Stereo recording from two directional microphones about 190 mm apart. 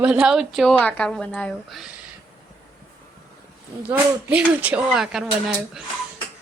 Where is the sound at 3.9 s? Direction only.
10° right (ahead or behind).